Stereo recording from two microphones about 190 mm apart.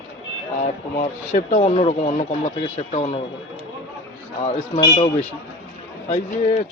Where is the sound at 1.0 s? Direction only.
35° left (ahead or behind).